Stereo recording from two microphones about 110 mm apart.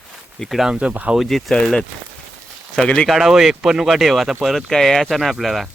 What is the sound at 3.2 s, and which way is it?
Speech, 5° right (ahead or behind).